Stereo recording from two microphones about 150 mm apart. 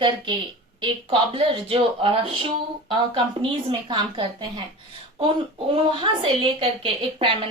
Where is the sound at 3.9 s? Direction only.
30° right (ahead or behind).